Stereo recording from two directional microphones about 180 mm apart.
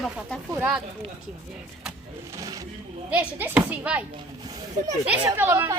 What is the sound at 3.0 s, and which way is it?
A child's voice, 5° right (ahead or behind).